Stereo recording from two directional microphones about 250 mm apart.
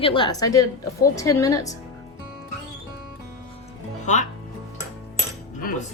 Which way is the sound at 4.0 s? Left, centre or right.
Left.